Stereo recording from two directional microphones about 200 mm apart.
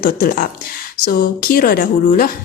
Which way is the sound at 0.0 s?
50° left (ahead or behind).